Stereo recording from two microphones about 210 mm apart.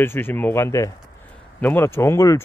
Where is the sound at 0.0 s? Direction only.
10° left (ahead or behind).